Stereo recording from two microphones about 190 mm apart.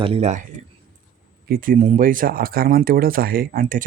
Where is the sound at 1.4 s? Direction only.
50° right (ahead or behind).